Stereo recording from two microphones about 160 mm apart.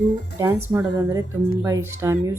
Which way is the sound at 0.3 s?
15° right (ahead or behind).